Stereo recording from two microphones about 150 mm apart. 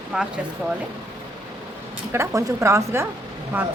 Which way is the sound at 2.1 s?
20° right (ahead or behind).